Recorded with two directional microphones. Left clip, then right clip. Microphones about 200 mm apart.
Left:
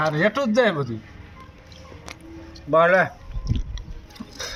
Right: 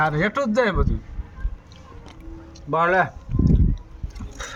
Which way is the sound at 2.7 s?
50° right (ahead or behind).